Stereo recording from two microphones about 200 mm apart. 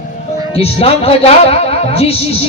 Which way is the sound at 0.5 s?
30° left (ahead or behind).